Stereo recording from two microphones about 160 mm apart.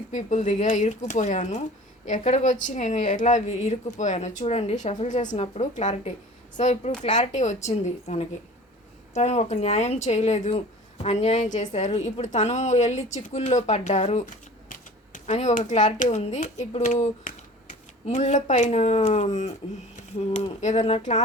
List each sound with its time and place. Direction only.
0.1 s speech: 50° left (ahead or behind)